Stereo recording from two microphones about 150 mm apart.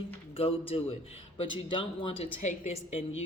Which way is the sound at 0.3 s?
40° left (ahead or behind).